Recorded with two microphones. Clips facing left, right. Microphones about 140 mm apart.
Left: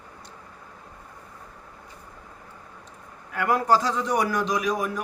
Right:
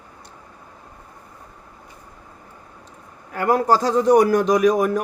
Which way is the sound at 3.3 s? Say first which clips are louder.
Right 4 dB; 40° right (ahead or behind).